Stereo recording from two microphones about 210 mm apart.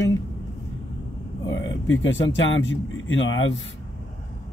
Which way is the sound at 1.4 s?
60° left (ahead or behind).